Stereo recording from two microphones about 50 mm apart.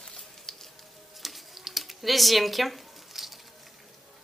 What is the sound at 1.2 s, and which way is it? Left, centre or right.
Typing, centre.